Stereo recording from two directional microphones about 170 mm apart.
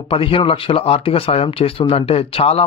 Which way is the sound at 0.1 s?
30° left (ahead or behind).